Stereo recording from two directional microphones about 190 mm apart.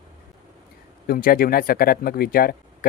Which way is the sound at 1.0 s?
50° left (ahead or behind).